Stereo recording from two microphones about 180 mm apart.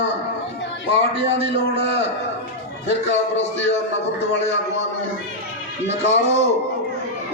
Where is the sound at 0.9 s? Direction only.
30° right (ahead or behind).